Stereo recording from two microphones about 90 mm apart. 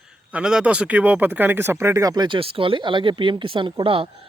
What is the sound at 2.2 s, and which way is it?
Speech, 70° right (ahead or behind).